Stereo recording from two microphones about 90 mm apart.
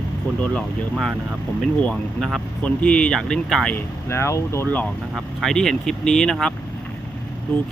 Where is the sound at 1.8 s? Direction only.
10° left (ahead or behind).